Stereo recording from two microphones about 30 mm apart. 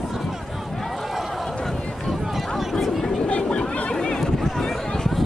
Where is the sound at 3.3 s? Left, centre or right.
Left.